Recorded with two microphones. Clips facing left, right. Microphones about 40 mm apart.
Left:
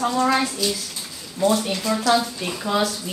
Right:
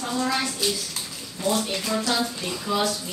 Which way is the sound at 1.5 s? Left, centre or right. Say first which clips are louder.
Left 2 dB; left.